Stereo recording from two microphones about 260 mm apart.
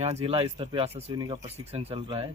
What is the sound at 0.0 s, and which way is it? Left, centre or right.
Speech, right.